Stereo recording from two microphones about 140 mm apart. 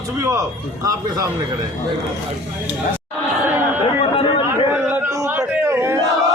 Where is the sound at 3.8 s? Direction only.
40° left (ahead or behind).